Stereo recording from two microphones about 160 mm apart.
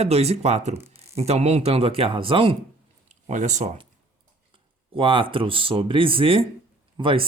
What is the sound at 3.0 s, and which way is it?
Speech, 50° right (ahead or behind).